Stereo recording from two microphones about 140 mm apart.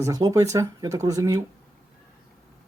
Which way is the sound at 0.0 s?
25° right (ahead or behind).